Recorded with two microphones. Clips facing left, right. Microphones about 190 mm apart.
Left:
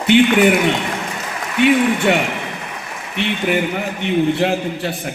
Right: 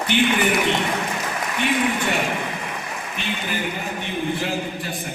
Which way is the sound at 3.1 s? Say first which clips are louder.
Left 10 dB; 70° left (ahead or behind).